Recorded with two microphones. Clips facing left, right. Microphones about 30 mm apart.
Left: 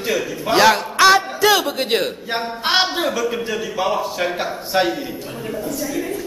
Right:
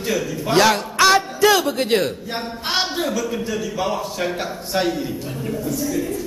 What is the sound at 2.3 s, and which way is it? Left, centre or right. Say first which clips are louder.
A man's voice: left 5 dB; left.